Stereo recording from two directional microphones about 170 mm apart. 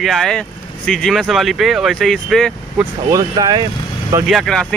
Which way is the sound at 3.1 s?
25° right (ahead or behind).